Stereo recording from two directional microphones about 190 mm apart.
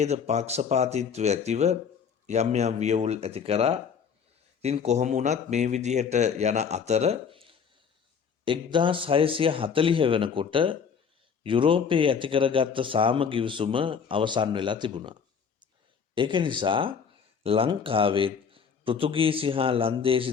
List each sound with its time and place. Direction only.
0.0 s a man's voice: 35° right (ahead or behind)